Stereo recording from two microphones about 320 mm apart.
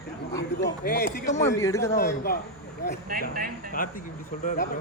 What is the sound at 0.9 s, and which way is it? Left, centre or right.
Speech, left.